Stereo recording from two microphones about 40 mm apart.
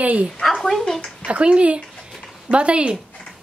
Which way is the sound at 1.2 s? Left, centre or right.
Right.